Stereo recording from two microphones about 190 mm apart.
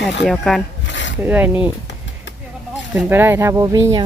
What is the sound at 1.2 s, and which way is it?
Speech, 10° right (ahead or behind).